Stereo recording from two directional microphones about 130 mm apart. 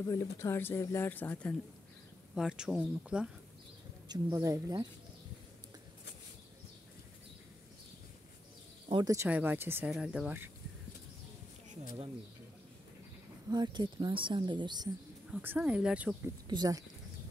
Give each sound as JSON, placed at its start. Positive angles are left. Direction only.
{"t": 0.0, "sound": "speech", "side_deg": 25}
{"t": 2.3, "sound": "speech", "side_deg": -5}
{"t": 4.1, "sound": "speech", "side_deg": -25}
{"t": 9.0, "sound": "speech", "side_deg": -25}
{"t": 9.8, "sound": "speech", "side_deg": -5}
{"t": 13.5, "sound": "speech", "side_deg": -35}
{"t": 15.3, "sound": "speech", "side_deg": -10}
{"t": 16.4, "sound": "speech", "side_deg": -30}